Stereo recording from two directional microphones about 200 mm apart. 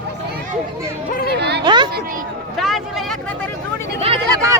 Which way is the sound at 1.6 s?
20° right (ahead or behind).